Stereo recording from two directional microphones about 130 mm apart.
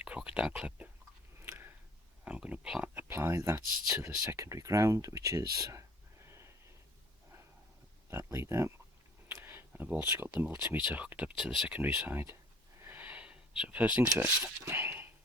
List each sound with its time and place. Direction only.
0.0 s whispering: 10° right (ahead or behind)
2.2 s speech: 10° right (ahead or behind); by 5.8 s 25° right (ahead or behind)
8.1 s speech: 20° right (ahead or behind)
9.4 s a sound: 15° right (ahead or behind)
10.1 s speech: 20° right (ahead or behind)
12.8 s a sound: 15° right (ahead or behind)
14.2 s speech: 15° right (ahead or behind)